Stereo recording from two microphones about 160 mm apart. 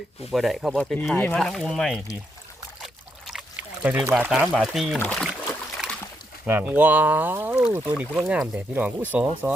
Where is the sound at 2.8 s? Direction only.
Centre (ahead or behind).